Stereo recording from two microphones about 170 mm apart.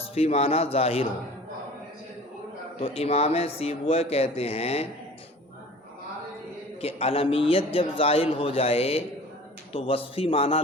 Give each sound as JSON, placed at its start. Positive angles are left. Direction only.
{"t": 0.0, "sound": "a man's voice", "side_deg": 35}
{"t": 2.8, "sound": "a man's voice", "side_deg": 35}
{"t": 6.8, "sound": "a man's voice", "side_deg": 35}